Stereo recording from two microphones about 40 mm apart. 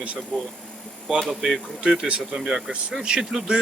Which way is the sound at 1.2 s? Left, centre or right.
Centre.